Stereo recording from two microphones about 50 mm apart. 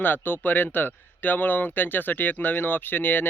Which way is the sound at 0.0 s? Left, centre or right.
Left.